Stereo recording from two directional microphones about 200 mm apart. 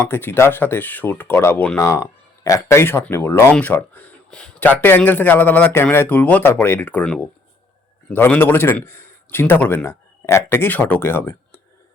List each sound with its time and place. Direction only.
0.1 s a man's voice: 10° left (ahead or behind)